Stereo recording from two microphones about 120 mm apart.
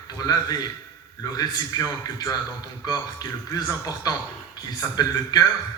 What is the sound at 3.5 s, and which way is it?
A man's voice, 35° left (ahead or behind).